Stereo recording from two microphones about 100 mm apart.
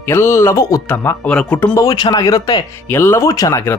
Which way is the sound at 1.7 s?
40° left (ahead or behind).